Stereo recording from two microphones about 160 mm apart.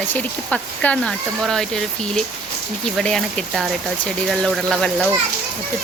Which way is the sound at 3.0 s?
Centre (ahead or behind).